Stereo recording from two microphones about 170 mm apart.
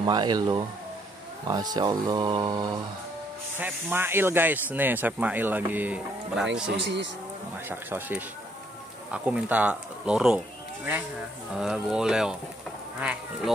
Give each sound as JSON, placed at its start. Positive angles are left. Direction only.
{"t": 0.0, "sound": "speech", "side_deg": -25}
{"t": 3.5, "sound": "speech", "side_deg": -10}
{"t": 7.6, "sound": "speech", "side_deg": -10}
{"t": 11.5, "sound": "speech", "side_deg": -5}